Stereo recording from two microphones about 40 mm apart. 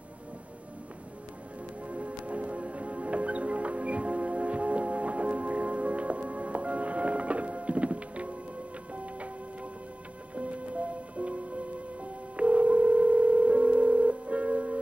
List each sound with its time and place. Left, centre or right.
1.9 s music: right
10.3 s music: right